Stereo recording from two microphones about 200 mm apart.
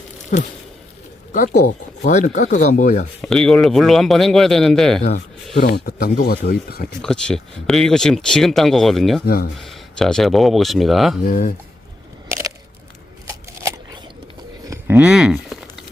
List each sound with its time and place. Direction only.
0.3 s speech: 40° left (ahead or behind)
3.2 s speech: 5° left (ahead or behind)
5.5 s speech: 55° left (ahead or behind)
7.0 s speech: 5° left (ahead or behind)
9.2 s speech: 50° left (ahead or behind)
9.6 s speech: centre (ahead or behind)
11.3 s speech: 45° left (ahead or behind)
12.3 s crushing: 15° right (ahead or behind)
13.2 s a sound: 15° right (ahead or behind)